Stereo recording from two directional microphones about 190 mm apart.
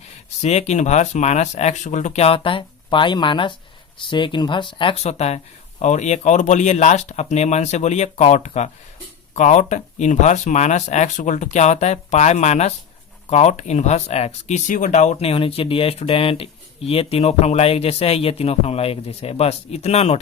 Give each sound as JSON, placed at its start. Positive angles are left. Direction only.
{"t": 0.0, "sound": "speech", "side_deg": 35}